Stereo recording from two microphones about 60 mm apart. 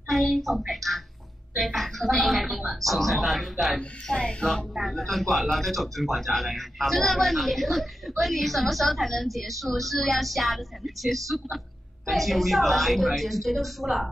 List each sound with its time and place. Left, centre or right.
0.1 s a sound: centre
1.6 s a woman's voice: centre
4.1 s speech: centre
4.7 s a woman's voice: centre